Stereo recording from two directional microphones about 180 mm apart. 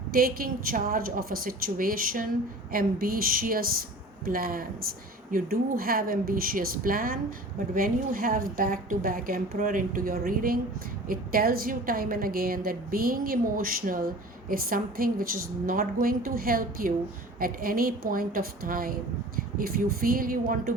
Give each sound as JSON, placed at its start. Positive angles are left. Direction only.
{"t": 0.1, "sound": "a woman's voice", "side_deg": -55}